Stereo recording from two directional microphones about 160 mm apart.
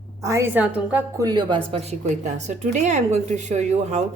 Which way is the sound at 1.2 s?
25° right (ahead or behind).